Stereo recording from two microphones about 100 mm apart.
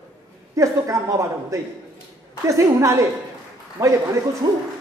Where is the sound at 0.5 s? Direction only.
35° right (ahead or behind).